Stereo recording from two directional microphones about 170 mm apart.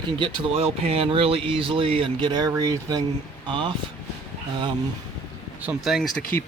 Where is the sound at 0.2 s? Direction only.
30° right (ahead or behind).